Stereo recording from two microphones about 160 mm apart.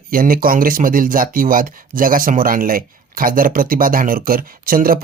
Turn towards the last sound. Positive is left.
turn(degrees=-65)  # may be behind; listen again after turning